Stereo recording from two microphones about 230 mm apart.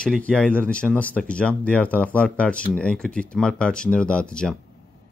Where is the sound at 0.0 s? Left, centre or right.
Centre.